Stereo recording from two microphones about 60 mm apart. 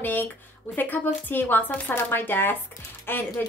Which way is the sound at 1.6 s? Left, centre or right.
Left.